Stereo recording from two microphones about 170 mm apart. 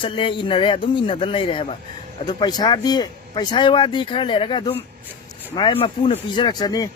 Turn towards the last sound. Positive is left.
turn(degrees=25)  # may be behind; listen again after turning